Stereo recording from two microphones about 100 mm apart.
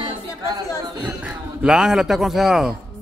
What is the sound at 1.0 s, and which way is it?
A man's voice, 10° right (ahead or behind).